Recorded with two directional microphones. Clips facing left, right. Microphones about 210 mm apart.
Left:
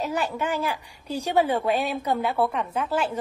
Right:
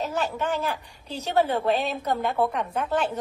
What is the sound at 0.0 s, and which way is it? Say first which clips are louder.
A woman's voice: left 1 dB; 10° left (ahead or behind).